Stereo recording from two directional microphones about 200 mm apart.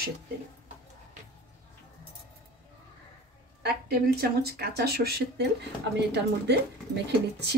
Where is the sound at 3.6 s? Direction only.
50° right (ahead or behind).